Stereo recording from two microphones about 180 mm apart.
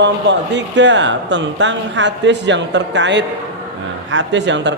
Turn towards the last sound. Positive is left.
turn(degrees=-80)